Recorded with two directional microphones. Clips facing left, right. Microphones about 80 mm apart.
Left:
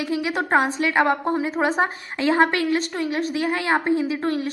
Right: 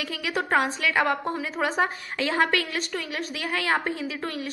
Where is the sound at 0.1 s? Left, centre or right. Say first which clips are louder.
Left 4 dB; left.